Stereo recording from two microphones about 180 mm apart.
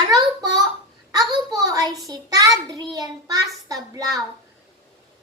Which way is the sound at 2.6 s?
20° right (ahead or behind).